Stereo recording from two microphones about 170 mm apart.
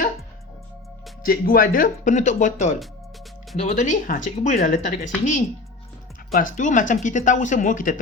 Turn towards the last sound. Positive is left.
turn(degrees=50)  # may be behind; listen again after turning